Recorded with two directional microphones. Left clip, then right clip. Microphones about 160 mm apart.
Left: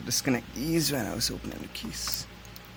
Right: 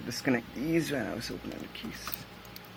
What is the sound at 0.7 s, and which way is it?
Speech, 50° left (ahead or behind).